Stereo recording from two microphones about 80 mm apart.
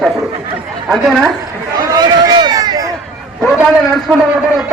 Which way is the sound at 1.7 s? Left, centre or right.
Right.